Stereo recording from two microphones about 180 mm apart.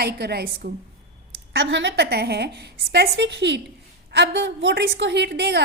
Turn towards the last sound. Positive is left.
turn(degrees=-70)  # may be behind; listen again after turning